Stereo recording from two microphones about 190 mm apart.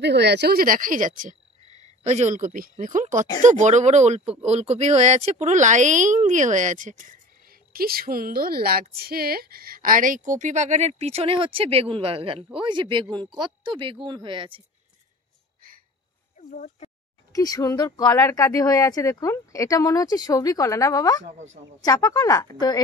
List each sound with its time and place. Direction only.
0.0 s frog: 65° right (ahead or behind); by 3.3 s 40° right (ahead or behind)
3.4 s speech: 40° right (ahead or behind)
16.3 s a sound: 40° left (ahead or behind)
17.3 s speech: 20° left (ahead or behind)